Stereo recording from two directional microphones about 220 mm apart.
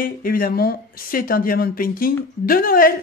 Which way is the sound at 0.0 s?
40° left (ahead or behind).